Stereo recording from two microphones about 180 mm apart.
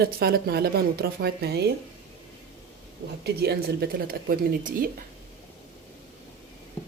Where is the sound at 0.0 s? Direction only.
60° right (ahead or behind).